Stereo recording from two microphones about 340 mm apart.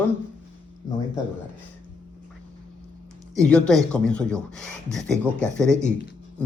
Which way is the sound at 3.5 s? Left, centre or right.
Centre.